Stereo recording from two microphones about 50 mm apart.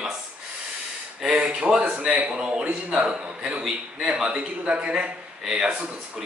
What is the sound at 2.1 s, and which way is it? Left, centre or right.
A man's voice, right.